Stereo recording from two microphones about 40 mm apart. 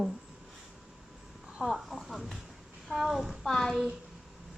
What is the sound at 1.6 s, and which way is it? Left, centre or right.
Speech, centre.